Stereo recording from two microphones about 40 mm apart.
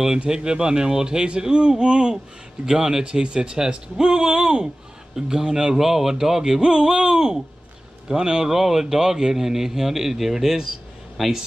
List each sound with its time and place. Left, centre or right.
0.3 s a man's voice: right
2.6 s a man's voice: centre